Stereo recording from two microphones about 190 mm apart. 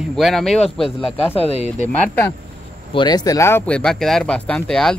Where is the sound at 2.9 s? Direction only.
20° left (ahead or behind); by 5.0 s 5° left (ahead or behind).